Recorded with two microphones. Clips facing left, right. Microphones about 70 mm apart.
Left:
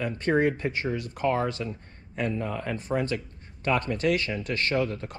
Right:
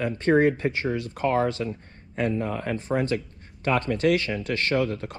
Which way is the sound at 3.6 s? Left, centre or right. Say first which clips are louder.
Right 3 dB; right.